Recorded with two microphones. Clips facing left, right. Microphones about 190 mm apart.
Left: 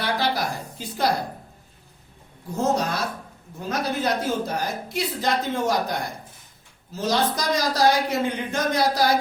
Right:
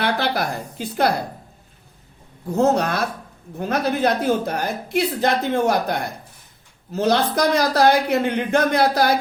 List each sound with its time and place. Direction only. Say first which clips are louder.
0.0 s a woman's voice: right 3 dB; 60° right (ahead or behind)
2.5 s a woman's voice: right 5 dB; 60° right (ahead or behind)